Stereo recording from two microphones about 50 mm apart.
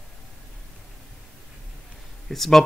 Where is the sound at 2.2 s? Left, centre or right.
Centre.